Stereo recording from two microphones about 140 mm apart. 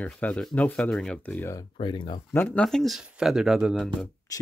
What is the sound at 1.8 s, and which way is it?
Speech, 35° left (ahead or behind).